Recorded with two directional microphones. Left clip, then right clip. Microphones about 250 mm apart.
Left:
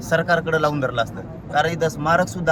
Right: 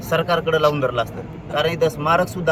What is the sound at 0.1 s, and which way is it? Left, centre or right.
A man's voice, centre.